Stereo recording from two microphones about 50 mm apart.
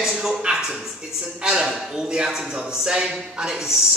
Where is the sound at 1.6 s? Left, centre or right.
Centre.